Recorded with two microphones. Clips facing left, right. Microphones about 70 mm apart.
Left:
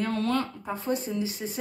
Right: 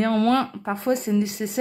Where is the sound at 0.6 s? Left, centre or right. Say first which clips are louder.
Right 6 dB; right.